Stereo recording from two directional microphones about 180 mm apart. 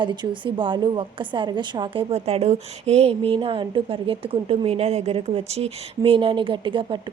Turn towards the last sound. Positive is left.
turn(degrees=-30)  # may be behind; listen again after turning